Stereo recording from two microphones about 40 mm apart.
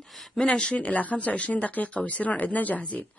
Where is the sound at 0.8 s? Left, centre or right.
Left.